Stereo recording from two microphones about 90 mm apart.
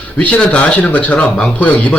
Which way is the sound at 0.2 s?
15° left (ahead or behind).